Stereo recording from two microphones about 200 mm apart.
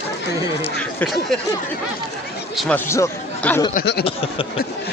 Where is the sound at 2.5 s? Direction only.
10° left (ahead or behind).